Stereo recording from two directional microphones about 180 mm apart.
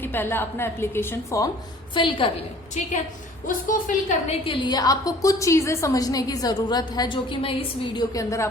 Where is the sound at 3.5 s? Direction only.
50° left (ahead or behind).